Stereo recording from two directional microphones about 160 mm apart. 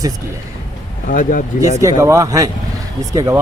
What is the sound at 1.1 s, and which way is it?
Speech, 60° left (ahead or behind).